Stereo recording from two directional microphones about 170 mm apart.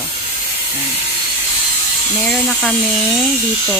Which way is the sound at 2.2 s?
Centre (ahead or behind).